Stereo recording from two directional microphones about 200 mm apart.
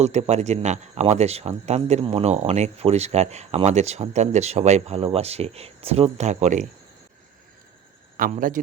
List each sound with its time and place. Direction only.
0.0 s speech: 35° right (ahead or behind)
8.1 s speech: 45° right (ahead or behind)